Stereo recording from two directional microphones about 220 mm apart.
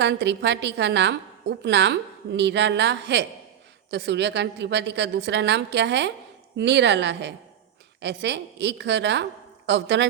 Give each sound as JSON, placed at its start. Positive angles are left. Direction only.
{"t": 0.0, "sound": "a woman's voice", "side_deg": -50}